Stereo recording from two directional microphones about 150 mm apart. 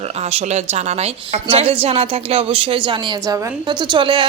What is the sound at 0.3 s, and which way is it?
A woman's voice, 45° right (ahead or behind).